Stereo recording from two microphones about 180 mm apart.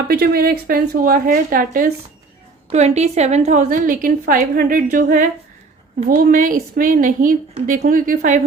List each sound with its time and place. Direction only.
0.1 s a woman's voice: 60° right (ahead or behind)
2.7 s a woman's voice: 40° right (ahead or behind)